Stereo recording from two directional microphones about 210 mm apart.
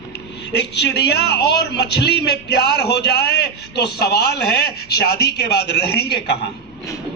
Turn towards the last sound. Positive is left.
turn(degrees=50)  # may be behind; listen again after turning